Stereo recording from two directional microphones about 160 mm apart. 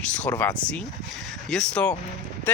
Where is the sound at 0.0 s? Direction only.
10° left (ahead or behind).